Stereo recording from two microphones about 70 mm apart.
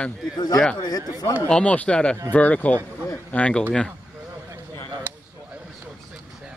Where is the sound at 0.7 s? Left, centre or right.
Left.